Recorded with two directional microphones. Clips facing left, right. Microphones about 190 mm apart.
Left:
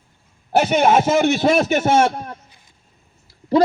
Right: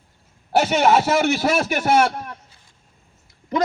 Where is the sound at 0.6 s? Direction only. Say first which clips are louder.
Left 2 dB; 15° left (ahead or behind).